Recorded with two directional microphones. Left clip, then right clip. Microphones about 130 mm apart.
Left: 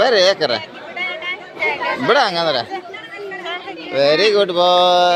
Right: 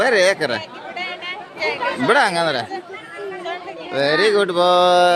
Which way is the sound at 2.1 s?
35° right (ahead or behind).